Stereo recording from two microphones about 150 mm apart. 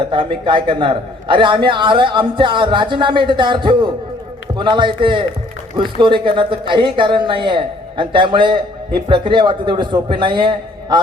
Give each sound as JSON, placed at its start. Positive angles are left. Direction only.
{"t": 0.0, "sound": "a man's voice", "side_deg": -35}